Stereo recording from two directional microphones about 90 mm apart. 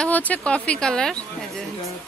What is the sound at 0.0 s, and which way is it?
Speech, 15° left (ahead or behind).